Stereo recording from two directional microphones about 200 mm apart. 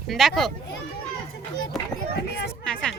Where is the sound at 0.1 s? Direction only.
Centre (ahead or behind).